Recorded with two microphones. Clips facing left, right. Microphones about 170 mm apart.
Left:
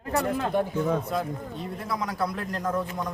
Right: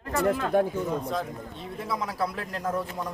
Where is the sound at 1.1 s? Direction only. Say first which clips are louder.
Left 2 dB; centre (ahead or behind).